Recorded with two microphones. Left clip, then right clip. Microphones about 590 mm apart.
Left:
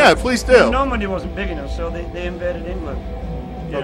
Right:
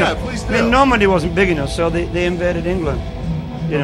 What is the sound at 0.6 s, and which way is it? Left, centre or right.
A man's voice, centre.